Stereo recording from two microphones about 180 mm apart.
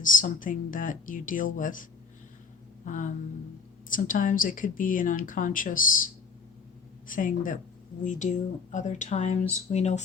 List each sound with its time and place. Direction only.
0.0 s speech: 50° left (ahead or behind)
7.1 s speech: 45° left (ahead or behind)